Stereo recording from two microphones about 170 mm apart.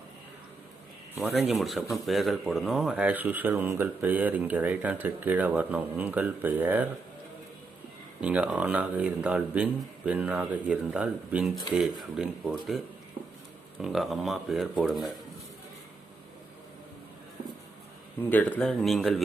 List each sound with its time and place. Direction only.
1.2 s speech: centre (ahead or behind)
8.2 s speech: 5° right (ahead or behind)
18.2 s speech: 10° left (ahead or behind)